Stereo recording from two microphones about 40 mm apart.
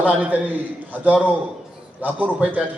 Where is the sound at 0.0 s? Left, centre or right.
Right.